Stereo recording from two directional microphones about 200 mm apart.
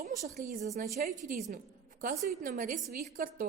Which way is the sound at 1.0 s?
40° right (ahead or behind).